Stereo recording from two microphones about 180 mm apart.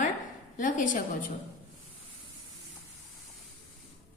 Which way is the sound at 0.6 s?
45° left (ahead or behind).